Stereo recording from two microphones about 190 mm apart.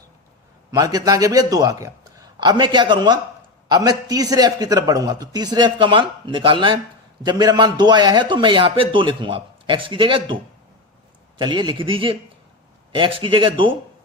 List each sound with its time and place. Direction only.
0.7 s a man's voice: 20° right (ahead or behind)